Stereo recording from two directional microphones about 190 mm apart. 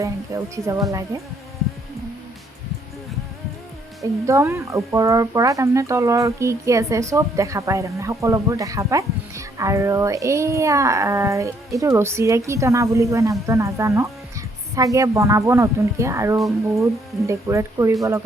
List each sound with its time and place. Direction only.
0.0 s speech: 15° right (ahead or behind)
4.3 s speech: 15° right (ahead or behind)